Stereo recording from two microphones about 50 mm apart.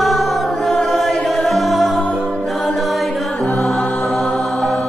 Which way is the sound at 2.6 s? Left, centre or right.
Centre.